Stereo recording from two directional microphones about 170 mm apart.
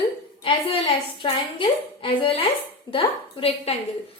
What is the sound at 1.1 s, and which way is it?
A woman's voice, 30° left (ahead or behind).